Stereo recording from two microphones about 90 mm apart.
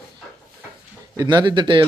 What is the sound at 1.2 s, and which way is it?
Speech, 50° right (ahead or behind).